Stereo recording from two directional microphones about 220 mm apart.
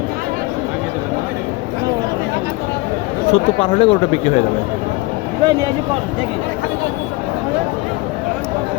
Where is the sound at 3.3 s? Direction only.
25° left (ahead or behind).